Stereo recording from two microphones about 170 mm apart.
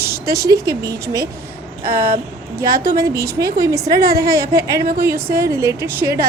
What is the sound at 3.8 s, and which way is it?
A woman's voice, 65° right (ahead or behind).